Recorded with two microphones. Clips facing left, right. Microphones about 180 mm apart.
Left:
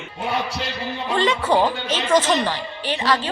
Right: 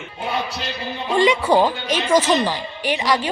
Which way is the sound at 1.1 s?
10° right (ahead or behind).